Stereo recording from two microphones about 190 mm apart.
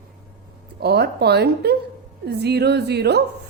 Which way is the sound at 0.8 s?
60° right (ahead or behind).